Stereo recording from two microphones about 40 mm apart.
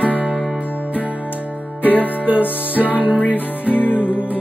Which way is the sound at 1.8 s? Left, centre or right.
Left.